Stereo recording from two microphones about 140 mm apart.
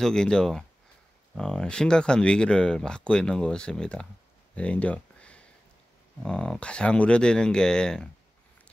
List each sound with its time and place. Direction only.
0.0 s speech: 5° left (ahead or behind)
4.6 s a sound: 10° left (ahead or behind)
6.2 s speech: 5° left (ahead or behind)